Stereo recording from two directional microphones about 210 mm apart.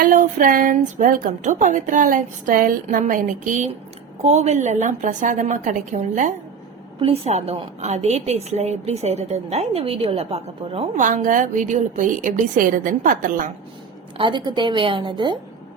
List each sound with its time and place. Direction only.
0.0 s a woman's voice: 40° right (ahead or behind)
14.2 s a woman's voice: 20° right (ahead or behind)